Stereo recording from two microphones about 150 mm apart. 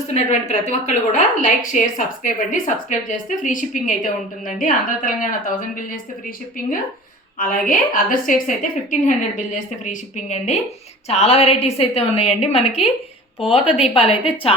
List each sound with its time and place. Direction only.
0.1 s a woman's voice: 45° left (ahead or behind); by 5.8 s 60° left (ahead or behind)
7.3 s a woman's voice: 65° left (ahead or behind); by 14.5 s 40° left (ahead or behind)